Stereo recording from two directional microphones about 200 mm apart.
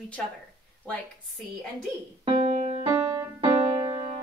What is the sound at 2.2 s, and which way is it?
Music, 30° right (ahead or behind).